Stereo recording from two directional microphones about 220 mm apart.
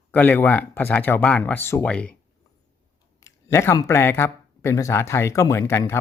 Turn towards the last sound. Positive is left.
turn(degrees=10)  # may be behind; listen again after turning